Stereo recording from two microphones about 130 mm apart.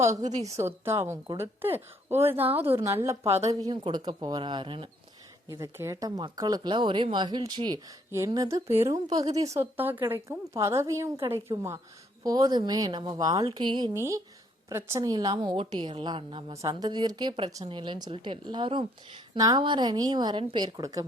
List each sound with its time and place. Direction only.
0.5 s a woman's voice: 20° right (ahead or behind)
3.7 s a woman's voice: 35° right (ahead or behind)
5.5 s a woman's voice: 25° right (ahead or behind)
8.7 s a woman's voice: 20° right (ahead or behind)
9.0 s a woman's voice: 30° right (ahead or behind)
13.9 s a woman's voice: 20° right (ahead or behind); by 16.6 s 40° right (ahead or behind)
16.6 s a woman's voice: 30° right (ahead or behind)